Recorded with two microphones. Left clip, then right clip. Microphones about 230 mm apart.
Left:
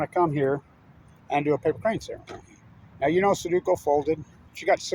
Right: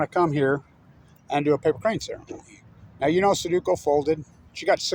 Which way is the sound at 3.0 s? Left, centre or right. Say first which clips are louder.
Right 1 dB; right.